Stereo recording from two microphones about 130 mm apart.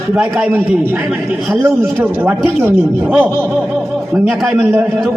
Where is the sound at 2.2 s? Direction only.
15° right (ahead or behind).